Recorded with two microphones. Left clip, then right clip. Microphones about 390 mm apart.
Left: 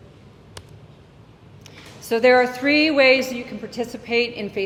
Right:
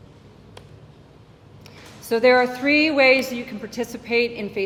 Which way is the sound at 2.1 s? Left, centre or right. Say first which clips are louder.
Left 1 dB; centre.